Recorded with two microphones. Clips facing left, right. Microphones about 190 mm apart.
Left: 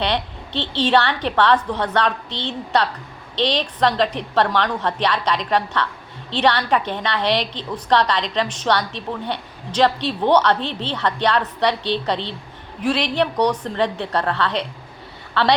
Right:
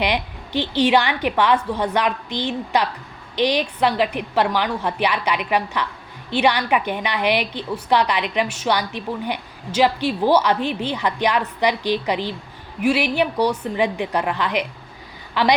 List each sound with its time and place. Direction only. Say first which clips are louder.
0.0 s a woman's voice: even; 10° right (ahead or behind)